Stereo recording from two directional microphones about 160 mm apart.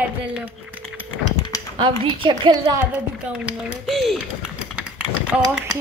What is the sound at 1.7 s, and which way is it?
A woman's voice, 30° right (ahead or behind).